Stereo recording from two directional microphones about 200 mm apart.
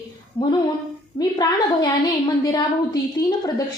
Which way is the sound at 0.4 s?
20° left (ahead or behind).